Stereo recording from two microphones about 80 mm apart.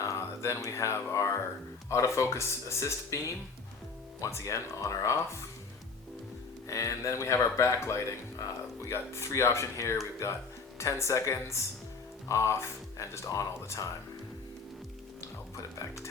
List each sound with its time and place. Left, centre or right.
0.0 s speech: left
6.7 s speech: left
15.2 s music: left